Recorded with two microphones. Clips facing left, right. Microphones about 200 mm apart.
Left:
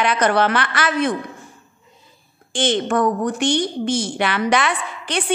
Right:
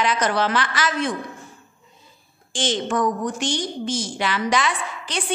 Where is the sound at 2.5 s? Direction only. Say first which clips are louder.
Left 4 dB; 60° left (ahead or behind).